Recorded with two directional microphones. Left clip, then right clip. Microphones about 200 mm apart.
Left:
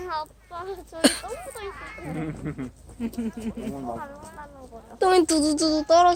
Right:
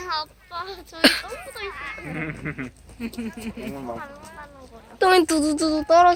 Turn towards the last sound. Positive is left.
turn(degrees=-10)  # may be behind; listen again after turning